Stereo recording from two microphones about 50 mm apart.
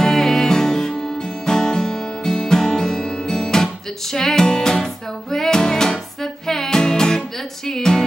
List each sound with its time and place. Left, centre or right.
0.0 s music: centre